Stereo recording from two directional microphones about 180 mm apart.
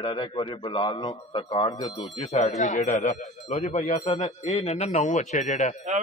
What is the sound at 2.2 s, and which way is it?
A man's voice, 40° left (ahead or behind).